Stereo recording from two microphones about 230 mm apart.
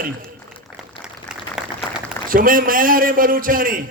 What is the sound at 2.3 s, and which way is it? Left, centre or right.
A man's voice, right.